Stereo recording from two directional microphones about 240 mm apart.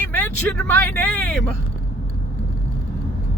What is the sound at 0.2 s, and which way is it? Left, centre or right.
Speech, centre.